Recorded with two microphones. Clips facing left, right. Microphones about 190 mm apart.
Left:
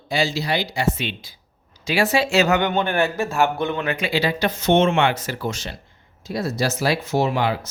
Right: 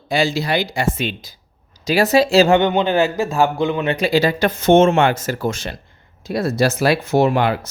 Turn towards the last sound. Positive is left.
turn(degrees=-55)  # may be behind; listen again after turning